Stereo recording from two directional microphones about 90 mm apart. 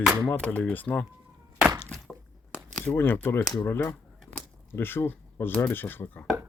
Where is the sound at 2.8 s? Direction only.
20° left (ahead or behind).